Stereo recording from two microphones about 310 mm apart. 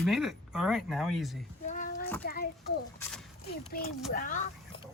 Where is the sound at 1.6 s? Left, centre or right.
Left.